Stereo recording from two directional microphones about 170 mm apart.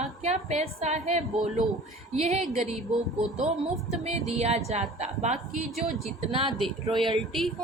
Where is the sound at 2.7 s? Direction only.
Centre (ahead or behind).